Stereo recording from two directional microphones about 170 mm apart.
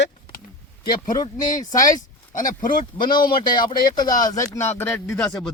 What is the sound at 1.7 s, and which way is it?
Speech, 20° left (ahead or behind).